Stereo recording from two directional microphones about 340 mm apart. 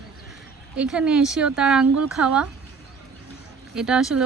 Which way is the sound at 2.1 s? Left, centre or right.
Centre.